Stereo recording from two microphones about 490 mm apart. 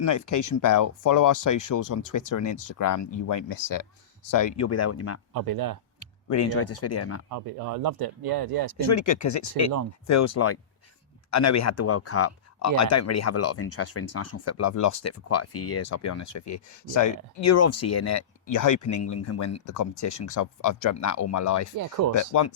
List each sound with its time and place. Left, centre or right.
0.0 s speech: left
5.3 s speech: right
6.0 s speech: left
7.3 s speech: right
8.8 s speech: left
21.8 s speech: right
22.2 s speech: left